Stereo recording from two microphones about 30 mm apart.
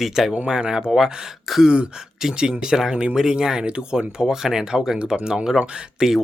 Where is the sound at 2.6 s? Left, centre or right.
Right.